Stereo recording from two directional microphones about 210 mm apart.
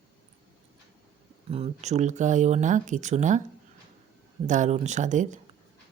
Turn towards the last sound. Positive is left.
turn(degrees=-35)  # may be behind; listen again after turning